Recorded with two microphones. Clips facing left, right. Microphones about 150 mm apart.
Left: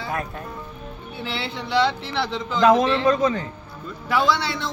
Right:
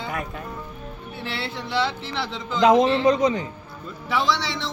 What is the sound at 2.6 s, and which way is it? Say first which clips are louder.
Speech: even; 20° right (ahead or behind).